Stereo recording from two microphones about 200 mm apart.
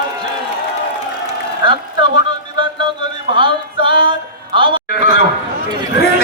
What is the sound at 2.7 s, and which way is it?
Music, 25° right (ahead or behind).